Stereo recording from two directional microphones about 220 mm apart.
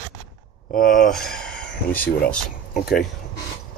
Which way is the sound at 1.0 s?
Centre (ahead or behind).